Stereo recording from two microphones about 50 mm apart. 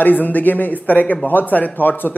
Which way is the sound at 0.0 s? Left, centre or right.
Left.